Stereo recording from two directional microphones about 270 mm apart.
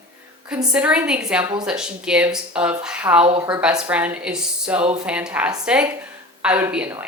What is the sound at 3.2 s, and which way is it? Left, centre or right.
Speech, right.